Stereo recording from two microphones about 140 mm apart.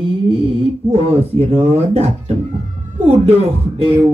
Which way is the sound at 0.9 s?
45° right (ahead or behind).